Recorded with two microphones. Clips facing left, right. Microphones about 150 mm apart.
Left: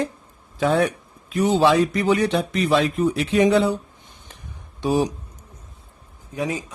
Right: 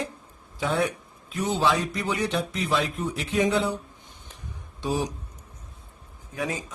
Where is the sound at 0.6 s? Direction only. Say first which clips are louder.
Left 6 dB; 70° left (ahead or behind).